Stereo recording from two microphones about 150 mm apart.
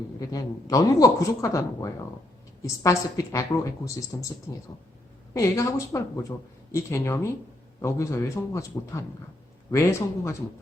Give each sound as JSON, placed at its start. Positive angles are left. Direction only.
{"t": 0.2, "sound": "a woman's voice", "side_deg": 25}